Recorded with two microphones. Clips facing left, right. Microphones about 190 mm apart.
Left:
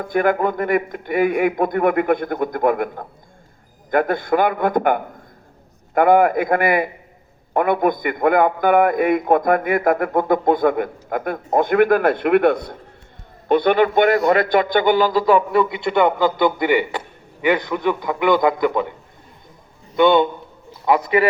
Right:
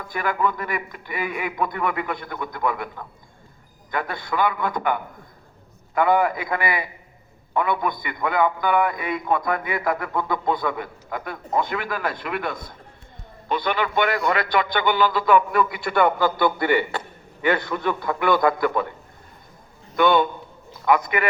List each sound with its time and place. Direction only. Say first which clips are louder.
0.0 s a man's voice: left 7 dB; 50° left (ahead or behind); by 18.9 s 20° left (ahead or behind)
20.0 s a man's voice: left 4 dB; 25° left (ahead or behind)